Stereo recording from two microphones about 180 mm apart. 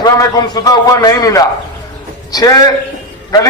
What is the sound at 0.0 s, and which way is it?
A man's voice, 20° left (ahead or behind).